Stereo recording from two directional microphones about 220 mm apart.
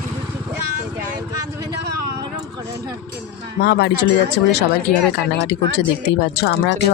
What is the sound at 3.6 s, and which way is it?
Speech, 50° left (ahead or behind).